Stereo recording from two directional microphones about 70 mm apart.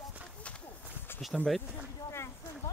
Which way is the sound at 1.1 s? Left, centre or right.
Left.